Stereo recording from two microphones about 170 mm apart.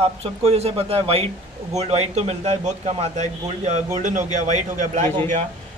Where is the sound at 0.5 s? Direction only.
35° right (ahead or behind).